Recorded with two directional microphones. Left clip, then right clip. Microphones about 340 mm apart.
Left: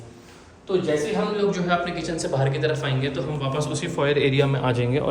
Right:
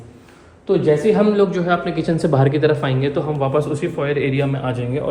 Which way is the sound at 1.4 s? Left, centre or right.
Centre.